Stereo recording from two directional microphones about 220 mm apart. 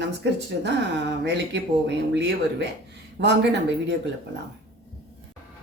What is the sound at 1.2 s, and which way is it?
Speech, 50° right (ahead or behind).